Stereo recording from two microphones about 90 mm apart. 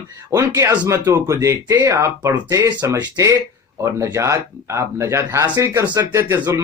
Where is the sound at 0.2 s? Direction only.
35° right (ahead or behind).